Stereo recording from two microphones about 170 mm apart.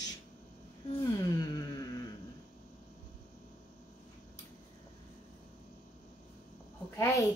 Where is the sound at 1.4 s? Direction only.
25° left (ahead or behind).